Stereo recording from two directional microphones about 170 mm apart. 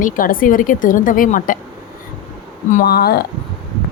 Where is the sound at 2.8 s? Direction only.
65° left (ahead or behind).